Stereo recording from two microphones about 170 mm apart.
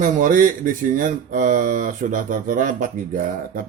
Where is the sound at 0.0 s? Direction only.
50° right (ahead or behind).